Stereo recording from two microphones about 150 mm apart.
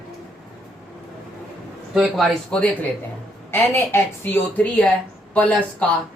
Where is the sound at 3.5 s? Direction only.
15° left (ahead or behind).